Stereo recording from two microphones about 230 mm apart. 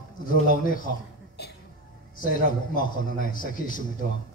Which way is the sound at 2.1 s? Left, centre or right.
Left.